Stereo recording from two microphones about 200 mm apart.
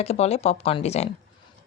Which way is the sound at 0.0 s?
30° left (ahead or behind).